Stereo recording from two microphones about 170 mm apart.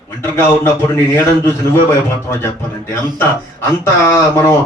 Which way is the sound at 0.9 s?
15° left (ahead or behind).